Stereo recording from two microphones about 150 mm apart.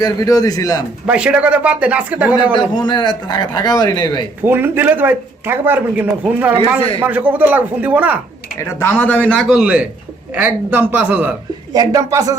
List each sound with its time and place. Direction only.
0.0 s a man's voice: 25° left (ahead or behind)
1.0 s a man's voice: 10° right (ahead or behind)
2.6 s a man's voice: 30° left (ahead or behind)
4.4 s a man's voice: 15° right (ahead or behind)
8.5 s speech: 15° left (ahead or behind)
9.3 s a man's voice: centre (ahead or behind)
11.7 s speech: 25° right (ahead or behind)